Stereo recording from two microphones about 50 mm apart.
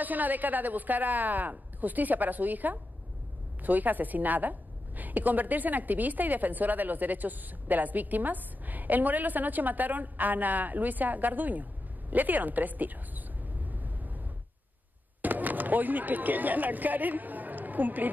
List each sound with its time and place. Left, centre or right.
0.0 s a woman's voice: right
13.7 s vehicle: right
15.2 s speech: right